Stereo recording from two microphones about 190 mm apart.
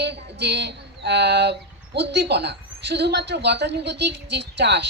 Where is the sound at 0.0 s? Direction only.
65° right (ahead or behind).